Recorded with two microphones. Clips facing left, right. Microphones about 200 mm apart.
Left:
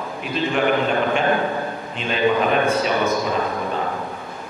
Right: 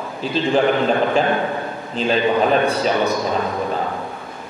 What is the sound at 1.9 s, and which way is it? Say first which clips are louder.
Speech: right 2 dB; 35° right (ahead or behind).